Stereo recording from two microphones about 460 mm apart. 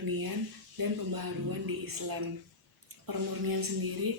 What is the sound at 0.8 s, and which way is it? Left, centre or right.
Speech, right.